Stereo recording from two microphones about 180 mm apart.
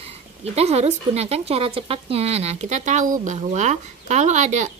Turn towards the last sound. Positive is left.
turn(degrees=-40)  # may be behind; listen again after turning